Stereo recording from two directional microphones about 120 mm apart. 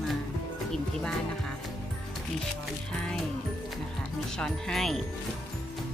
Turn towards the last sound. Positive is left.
turn(degrees=5)  # may be behind; listen again after turning